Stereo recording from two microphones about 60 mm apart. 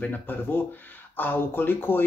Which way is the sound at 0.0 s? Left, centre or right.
Left.